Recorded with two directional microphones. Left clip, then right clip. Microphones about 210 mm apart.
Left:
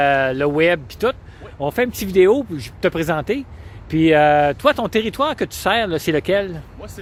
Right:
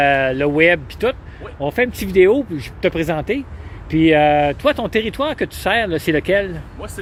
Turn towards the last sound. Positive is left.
turn(degrees=30)  # may be behind; listen again after turning